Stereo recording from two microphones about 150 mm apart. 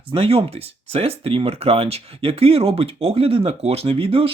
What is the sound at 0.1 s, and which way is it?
Speech, 40° right (ahead or behind).